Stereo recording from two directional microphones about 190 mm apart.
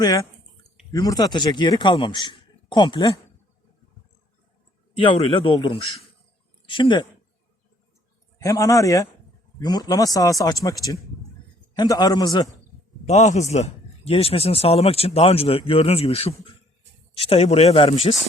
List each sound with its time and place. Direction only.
0.0 s a man's voice: 20° left (ahead or behind)
4.9 s a man's voice: 25° left (ahead or behind)
8.4 s a man's voice: 15° left (ahead or behind)
13.1 s speech: 40° left (ahead or behind)